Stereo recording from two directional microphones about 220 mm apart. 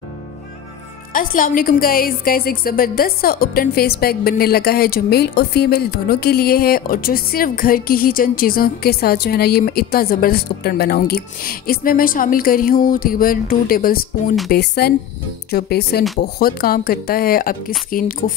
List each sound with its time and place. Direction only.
1.1 s a woman's voice: 40° left (ahead or behind)